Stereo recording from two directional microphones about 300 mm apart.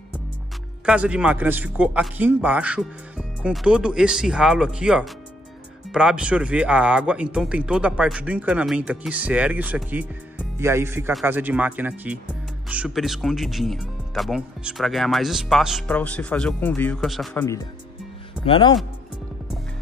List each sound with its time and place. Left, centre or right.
0.8 s speech: centre
18.4 s speech: centre